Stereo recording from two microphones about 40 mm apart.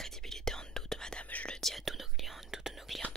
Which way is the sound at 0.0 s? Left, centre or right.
Centre.